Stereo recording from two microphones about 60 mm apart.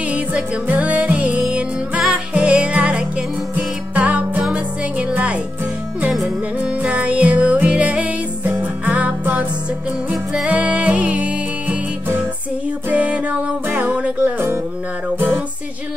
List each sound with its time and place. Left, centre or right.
0.1 s music: right
13.7 s music: right
13.9 s music: right